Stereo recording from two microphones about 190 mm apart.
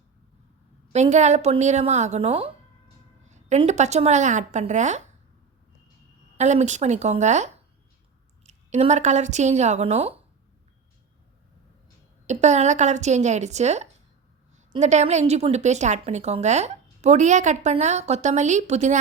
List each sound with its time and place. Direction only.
0.9 s a woman's voice: 35° right (ahead or behind)
6.3 s a woman's voice: 35° right (ahead or behind)
12.2 s a woman's voice: 35° right (ahead or behind)